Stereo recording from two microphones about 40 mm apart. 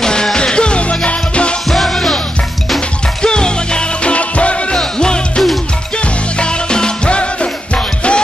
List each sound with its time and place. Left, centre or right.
0.0 s music: centre
3.2 s music: left
4.7 s music: centre
6.4 s music: left